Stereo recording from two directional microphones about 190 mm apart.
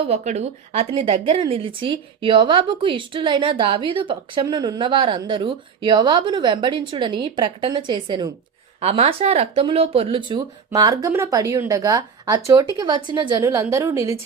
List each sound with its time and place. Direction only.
0.0 s a woman's voice: 35° right (ahead or behind); by 14.2 s 15° right (ahead or behind)